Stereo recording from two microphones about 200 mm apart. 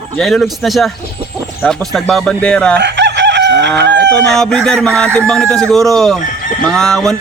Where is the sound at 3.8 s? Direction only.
60° right (ahead or behind).